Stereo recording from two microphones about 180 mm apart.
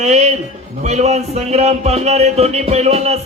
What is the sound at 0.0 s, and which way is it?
A man's voice, 40° right (ahead or behind).